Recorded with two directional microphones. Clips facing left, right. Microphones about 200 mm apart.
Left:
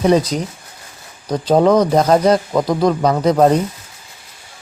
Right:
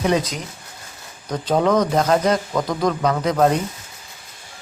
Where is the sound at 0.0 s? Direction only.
35° left (ahead or behind).